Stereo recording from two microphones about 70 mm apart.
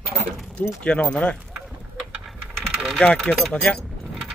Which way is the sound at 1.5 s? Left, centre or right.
Centre.